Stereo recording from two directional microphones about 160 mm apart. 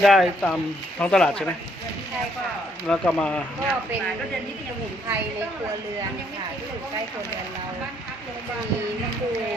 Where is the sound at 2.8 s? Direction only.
5° left (ahead or behind).